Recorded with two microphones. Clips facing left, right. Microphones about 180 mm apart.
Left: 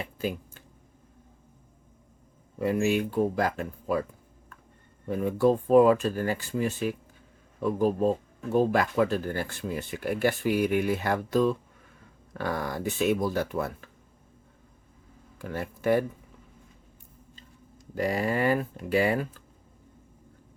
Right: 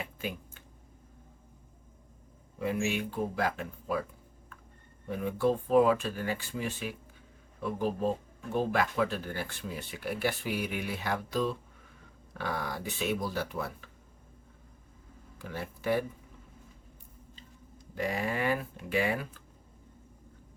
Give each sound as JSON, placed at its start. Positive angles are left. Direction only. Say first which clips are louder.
{"t": 0.2, "sound": "a sound", "louder": "left 10 dB", "side_deg": 40}
{"t": 2.6, "sound": "speech", "louder": "left 6 dB", "side_deg": 45}
{"t": 5.0, "sound": "speech", "louder": "left 5 dB", "side_deg": 40}
{"t": 15.4, "sound": "speech", "louder": "left 5 dB", "side_deg": 50}
{"t": 17.9, "sound": "speech", "louder": "left 5 dB", "side_deg": 40}